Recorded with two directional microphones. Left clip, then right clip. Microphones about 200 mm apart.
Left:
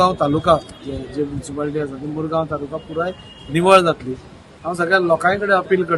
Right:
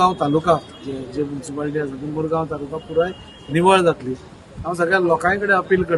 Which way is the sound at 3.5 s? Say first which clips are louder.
Left 2 dB; 10° left (ahead or behind).